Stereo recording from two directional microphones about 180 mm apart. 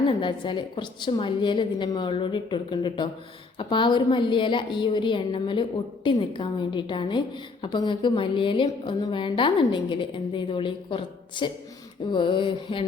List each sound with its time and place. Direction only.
0.1 s a woman's voice: 25° left (ahead or behind)